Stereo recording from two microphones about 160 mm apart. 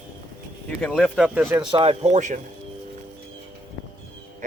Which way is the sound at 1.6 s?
30° right (ahead or behind).